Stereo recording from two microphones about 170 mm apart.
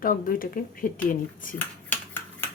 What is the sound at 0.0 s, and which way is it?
Speech, 55° left (ahead or behind).